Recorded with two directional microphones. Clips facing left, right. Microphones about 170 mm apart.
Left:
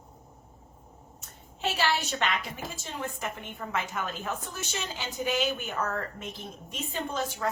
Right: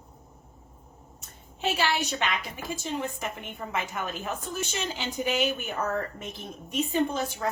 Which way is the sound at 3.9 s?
15° right (ahead or behind).